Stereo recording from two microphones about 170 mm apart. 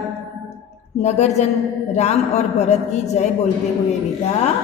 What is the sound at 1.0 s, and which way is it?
A man's voice, 40° left (ahead or behind).